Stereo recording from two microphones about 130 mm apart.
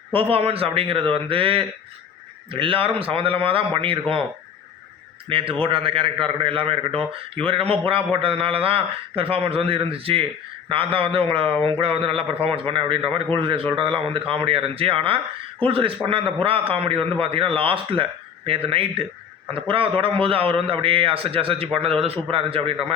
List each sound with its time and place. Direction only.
0.1 s a man's voice: 45° right (ahead or behind)
5.3 s a man's voice: 45° right (ahead or behind)